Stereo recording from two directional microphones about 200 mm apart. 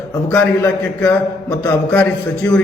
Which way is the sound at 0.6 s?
15° left (ahead or behind).